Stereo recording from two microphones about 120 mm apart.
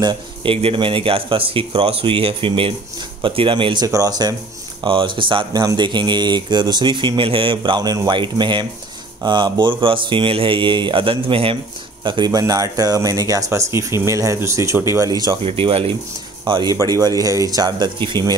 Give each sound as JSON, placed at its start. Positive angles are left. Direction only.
{"t": 0.0, "sound": "speech", "side_deg": -40}
{"t": 3.8, "sound": "speech", "side_deg": -30}
{"t": 4.8, "sound": "speech", "side_deg": -45}
{"t": 15.4, "sound": "speech", "side_deg": -50}